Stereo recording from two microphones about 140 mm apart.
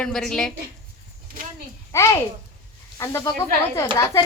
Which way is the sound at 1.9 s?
20° left (ahead or behind).